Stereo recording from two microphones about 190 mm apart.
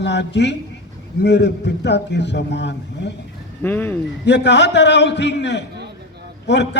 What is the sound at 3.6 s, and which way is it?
Speech, 10° left (ahead or behind).